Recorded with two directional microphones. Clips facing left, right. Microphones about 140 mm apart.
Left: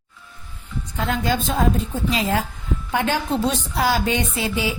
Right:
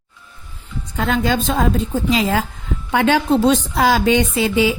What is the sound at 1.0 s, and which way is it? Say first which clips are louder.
A woman's voice: right 4 dB; 90° right.